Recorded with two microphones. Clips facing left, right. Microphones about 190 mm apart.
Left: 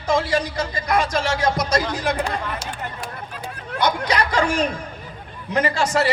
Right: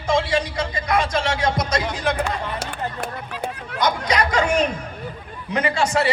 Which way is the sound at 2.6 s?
60° right (ahead or behind).